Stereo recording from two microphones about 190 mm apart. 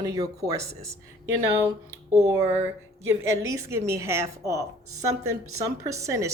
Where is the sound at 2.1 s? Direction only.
15° right (ahead or behind).